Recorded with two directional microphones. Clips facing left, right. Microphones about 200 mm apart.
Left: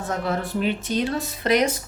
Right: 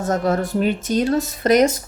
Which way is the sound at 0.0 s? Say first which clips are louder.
Right 6 dB; 45° right (ahead or behind).